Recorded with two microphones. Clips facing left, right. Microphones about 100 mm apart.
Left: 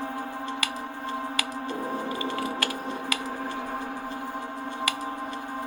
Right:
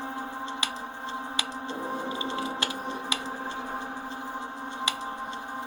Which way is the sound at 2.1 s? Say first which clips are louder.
Left 2 dB; 25° right (ahead or behind).